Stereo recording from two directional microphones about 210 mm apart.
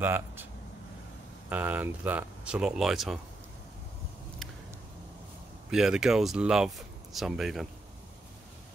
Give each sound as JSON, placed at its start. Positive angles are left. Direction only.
{"t": 0.0, "sound": "a sound", "side_deg": -10}
{"t": 1.5, "sound": "speech", "side_deg": -10}
{"t": 5.7, "sound": "speech", "side_deg": -5}